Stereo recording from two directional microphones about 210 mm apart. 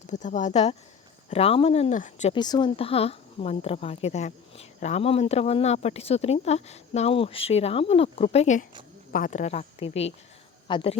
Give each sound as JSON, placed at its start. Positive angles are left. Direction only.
{"t": 0.1, "sound": "speech", "side_deg": 35}
{"t": 2.3, "sound": "speech", "side_deg": 20}